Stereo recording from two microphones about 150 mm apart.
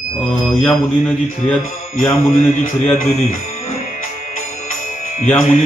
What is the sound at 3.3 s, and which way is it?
Music, 45° left (ahead or behind).